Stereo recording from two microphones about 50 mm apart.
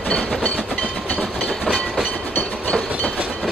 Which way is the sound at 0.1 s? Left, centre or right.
Left.